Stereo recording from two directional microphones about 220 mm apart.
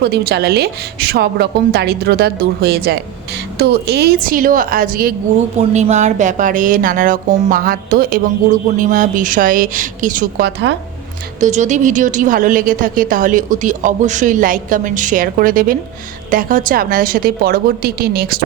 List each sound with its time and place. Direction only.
0.0 s a woman's voice: 50° right (ahead or behind)
11.3 s a woman's voice: 35° right (ahead or behind)